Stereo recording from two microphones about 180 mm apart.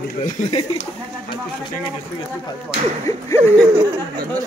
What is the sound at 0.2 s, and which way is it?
Speech, 40° left (ahead or behind).